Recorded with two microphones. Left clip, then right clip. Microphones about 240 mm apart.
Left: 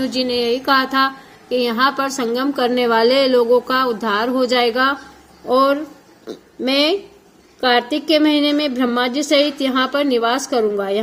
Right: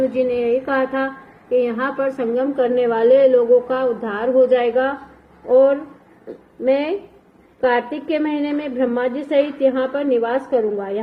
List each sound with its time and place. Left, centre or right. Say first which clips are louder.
0.3 s a sound: left 2 dB; left
1.5 s a woman's voice: left 2 dB; left
7.6 s a woman's voice: left 2 dB; left